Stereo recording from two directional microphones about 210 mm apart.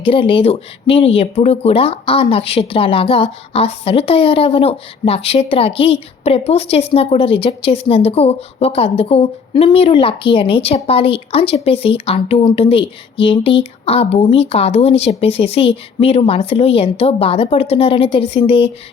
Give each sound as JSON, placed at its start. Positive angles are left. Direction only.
{"t": 0.0, "sound": "a woman's voice", "side_deg": 25}